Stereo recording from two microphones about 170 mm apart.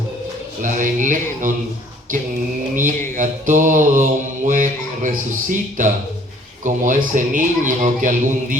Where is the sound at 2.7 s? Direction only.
50° right (ahead or behind).